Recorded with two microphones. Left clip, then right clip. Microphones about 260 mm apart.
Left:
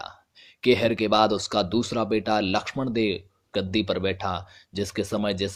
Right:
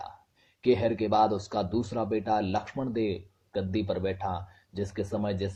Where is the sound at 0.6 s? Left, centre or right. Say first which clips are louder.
Left 4 dB; left.